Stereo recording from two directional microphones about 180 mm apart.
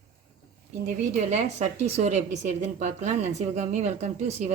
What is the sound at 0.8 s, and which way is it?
A woman's voice, 40° right (ahead or behind).